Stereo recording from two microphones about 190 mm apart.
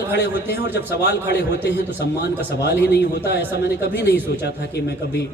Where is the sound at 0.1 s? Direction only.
60° left (ahead or behind).